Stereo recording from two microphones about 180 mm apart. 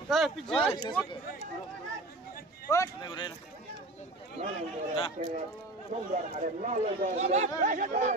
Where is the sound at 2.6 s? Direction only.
15° left (ahead or behind).